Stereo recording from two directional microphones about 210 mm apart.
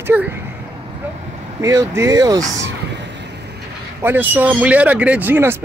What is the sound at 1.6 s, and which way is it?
Speech, 15° right (ahead or behind).